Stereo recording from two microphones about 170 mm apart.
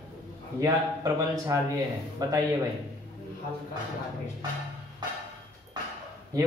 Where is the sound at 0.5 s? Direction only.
20° right (ahead or behind).